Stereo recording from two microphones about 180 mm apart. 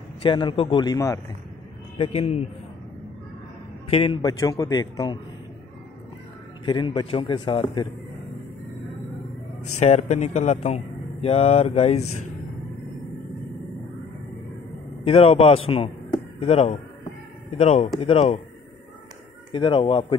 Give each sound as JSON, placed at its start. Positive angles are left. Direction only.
{"t": 0.2, "sound": "a man's voice", "side_deg": 25}
{"t": 2.0, "sound": "speech", "side_deg": 35}
{"t": 3.9, "sound": "a man's voice", "side_deg": 30}
{"t": 6.6, "sound": "a man's voice", "side_deg": 25}
{"t": 9.8, "sound": "speech", "side_deg": 40}
{"t": 15.0, "sound": "speech", "side_deg": 30}
{"t": 19.5, "sound": "a man's voice", "side_deg": 25}